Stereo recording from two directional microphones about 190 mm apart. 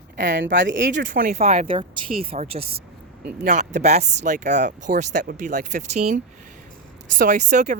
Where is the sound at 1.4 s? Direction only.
35° right (ahead or behind).